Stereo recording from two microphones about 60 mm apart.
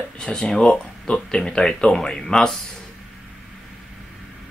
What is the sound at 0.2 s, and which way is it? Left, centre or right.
Speech, centre.